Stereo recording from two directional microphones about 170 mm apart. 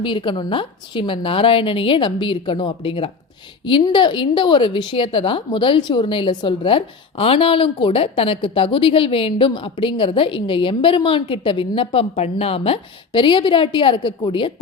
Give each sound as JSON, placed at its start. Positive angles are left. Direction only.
{"t": 0.0, "sound": "a woman's voice", "side_deg": 30}